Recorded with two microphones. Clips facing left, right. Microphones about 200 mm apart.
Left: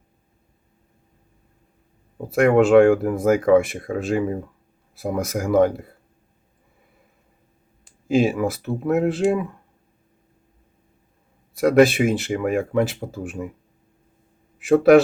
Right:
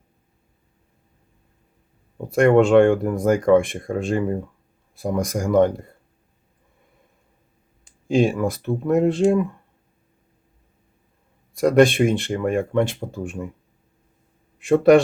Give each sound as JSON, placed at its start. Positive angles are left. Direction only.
{"t": 2.2, "sound": "speech", "side_deg": 5}
{"t": 7.9, "sound": "speech", "side_deg": 5}
{"t": 11.5, "sound": "speech", "side_deg": 5}
{"t": 14.6, "sound": "speech", "side_deg": 5}